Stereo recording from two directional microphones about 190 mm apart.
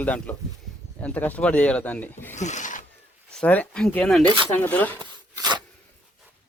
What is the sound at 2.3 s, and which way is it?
Speech, 40° left (ahead or behind).